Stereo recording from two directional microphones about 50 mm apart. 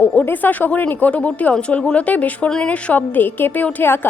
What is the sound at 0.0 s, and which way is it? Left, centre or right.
Speech, left.